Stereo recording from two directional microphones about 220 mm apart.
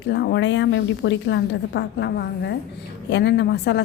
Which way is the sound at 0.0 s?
50° left (ahead or behind).